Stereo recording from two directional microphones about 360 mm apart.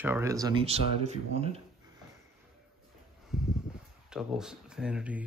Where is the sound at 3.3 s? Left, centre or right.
Centre.